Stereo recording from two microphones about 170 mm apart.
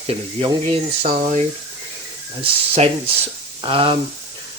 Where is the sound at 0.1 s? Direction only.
35° right (ahead or behind).